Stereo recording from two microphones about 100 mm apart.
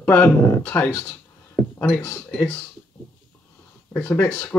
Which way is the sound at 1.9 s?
30° left (ahead or behind).